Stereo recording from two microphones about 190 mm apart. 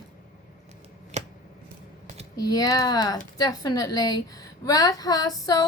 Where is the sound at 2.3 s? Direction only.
20° left (ahead or behind).